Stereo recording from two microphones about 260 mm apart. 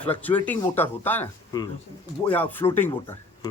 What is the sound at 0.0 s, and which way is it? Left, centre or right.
Speech, centre.